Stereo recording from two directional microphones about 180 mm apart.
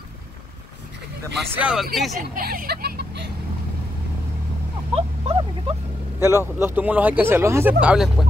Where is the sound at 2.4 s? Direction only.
55° right (ahead or behind).